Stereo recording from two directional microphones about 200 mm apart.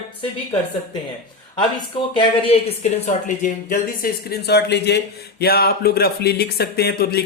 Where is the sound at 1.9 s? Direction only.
25° left (ahead or behind).